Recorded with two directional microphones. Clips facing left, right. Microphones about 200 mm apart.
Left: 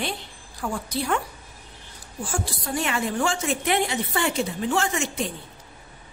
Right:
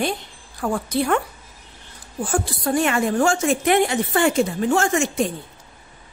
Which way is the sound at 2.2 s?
55° right (ahead or behind).